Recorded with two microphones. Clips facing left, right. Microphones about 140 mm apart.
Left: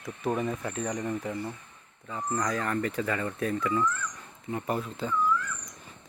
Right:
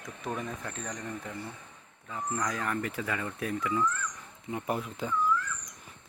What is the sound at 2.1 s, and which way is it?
Speech, centre (ahead or behind).